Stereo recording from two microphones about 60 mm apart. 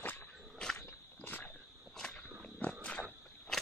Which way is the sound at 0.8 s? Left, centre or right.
Left.